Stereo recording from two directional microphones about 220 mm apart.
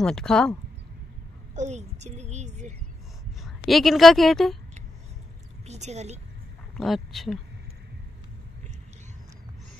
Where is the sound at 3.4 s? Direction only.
Centre (ahead or behind).